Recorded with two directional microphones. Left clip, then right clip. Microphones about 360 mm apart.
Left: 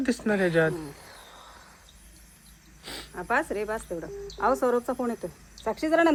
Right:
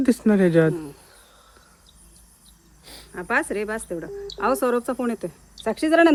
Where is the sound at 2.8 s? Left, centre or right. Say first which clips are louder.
Left 5 dB; left.